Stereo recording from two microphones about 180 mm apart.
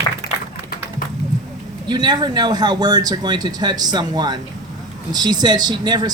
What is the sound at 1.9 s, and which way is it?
Speech, 25° right (ahead or behind).